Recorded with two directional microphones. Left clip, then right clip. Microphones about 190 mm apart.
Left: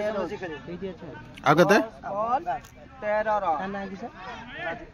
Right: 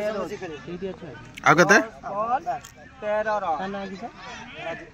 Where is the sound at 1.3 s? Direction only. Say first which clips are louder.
Right 3 dB; 5° right (ahead or behind).